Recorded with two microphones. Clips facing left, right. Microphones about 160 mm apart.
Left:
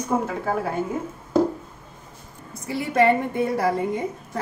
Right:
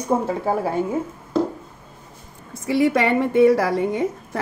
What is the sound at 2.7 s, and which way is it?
A woman's voice, 90° right.